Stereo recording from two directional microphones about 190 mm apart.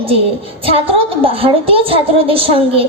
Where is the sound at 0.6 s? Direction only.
30° right (ahead or behind).